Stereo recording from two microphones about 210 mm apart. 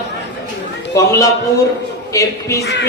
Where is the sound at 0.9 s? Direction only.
15° left (ahead or behind).